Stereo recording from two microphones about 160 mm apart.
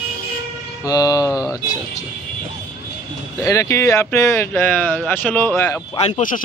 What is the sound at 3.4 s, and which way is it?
Speech, 20° left (ahead or behind).